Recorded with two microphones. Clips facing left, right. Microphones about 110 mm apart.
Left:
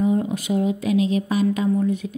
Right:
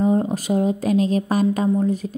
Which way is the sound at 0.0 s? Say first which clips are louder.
Right 2 dB; 40° right (ahead or behind).